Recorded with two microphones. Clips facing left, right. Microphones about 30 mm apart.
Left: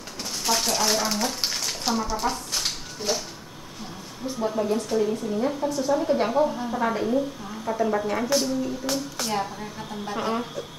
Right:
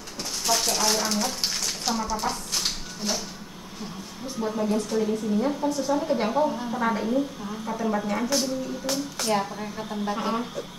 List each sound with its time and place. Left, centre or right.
0.2 s frying: centre
4.3 s a woman's voice: centre